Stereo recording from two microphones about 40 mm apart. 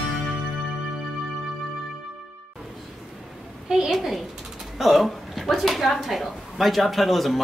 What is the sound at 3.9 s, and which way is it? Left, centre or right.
Speech, centre.